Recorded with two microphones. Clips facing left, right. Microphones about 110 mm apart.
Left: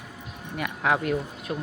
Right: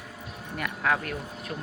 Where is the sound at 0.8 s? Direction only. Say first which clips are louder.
Left 4 dB; 15° left (ahead or behind).